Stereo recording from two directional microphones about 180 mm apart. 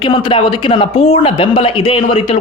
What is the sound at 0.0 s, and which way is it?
Speech, 25° left (ahead or behind).